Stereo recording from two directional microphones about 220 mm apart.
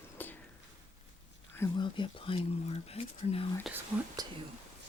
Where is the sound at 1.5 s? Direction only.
15° left (ahead or behind).